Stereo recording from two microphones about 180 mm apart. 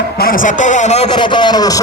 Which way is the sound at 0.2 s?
50° left (ahead or behind).